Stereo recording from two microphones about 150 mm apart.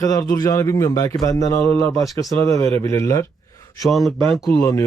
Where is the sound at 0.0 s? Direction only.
25° left (ahead or behind).